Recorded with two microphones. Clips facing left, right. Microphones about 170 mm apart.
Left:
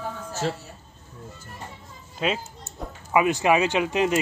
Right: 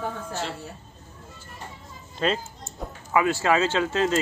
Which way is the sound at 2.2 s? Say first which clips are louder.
Right 1 dB; 5° left (ahead or behind).